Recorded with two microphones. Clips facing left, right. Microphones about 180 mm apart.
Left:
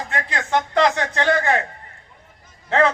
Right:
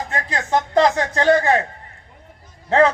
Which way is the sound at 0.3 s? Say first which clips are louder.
Right 2 dB; 30° right (ahead or behind).